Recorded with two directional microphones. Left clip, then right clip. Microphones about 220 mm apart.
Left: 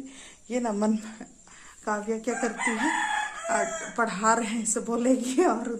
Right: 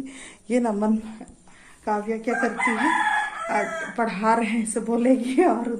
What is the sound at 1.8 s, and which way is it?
Speech, 15° left (ahead or behind).